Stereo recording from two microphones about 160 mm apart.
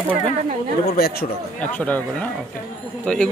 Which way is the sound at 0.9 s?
75° left (ahead or behind).